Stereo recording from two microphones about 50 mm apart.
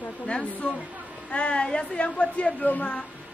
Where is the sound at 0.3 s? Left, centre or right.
Left.